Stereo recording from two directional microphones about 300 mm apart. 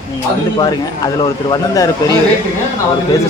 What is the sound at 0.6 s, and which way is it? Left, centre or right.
Speech, centre.